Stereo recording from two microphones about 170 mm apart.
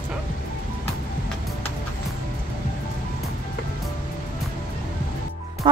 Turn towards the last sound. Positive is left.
turn(degrees=-30)  # may be behind; listen again after turning